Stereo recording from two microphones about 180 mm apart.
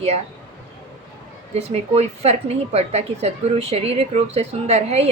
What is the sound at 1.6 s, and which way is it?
A woman's voice, 35° right (ahead or behind).